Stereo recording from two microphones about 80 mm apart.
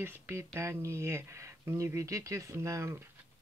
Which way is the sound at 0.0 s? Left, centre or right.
Right.